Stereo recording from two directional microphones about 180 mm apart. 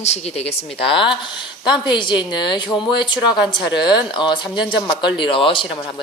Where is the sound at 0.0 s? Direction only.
35° left (ahead or behind).